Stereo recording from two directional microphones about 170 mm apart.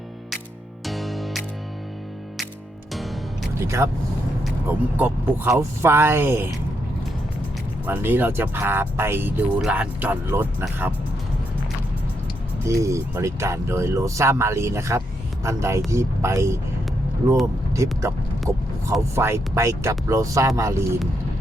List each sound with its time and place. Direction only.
0.9 s music: centre (ahead or behind)
2.9 s music: centre (ahead or behind)
3.6 s speech: 15° right (ahead or behind)
7.9 s speech: 10° right (ahead or behind)
12.6 s speech: 15° right (ahead or behind)
18.0 s a sound: 20° right (ahead or behind)
19.1 s speech: 15° right (ahead or behind)